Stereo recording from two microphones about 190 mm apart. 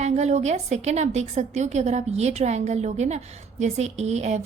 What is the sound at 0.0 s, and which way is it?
A woman's voice, 35° right (ahead or behind).